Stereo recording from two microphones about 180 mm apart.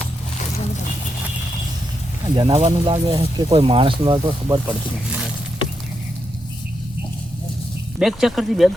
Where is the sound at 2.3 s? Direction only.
30° right (ahead or behind).